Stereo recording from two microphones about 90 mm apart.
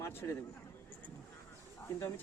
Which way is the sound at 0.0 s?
30° left (ahead or behind).